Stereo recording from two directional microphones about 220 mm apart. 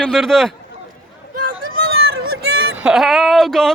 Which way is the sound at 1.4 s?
40° right (ahead or behind).